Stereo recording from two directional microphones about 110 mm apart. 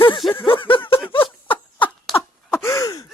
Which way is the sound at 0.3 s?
50° left (ahead or behind).